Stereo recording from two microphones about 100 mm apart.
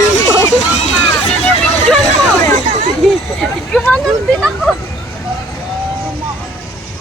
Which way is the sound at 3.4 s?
5° left (ahead or behind).